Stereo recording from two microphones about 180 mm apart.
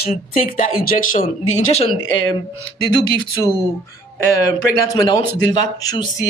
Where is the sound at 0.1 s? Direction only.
50° left (ahead or behind).